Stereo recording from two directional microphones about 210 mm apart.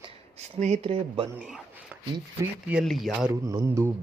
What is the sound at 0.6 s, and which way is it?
Speech, 30° right (ahead or behind).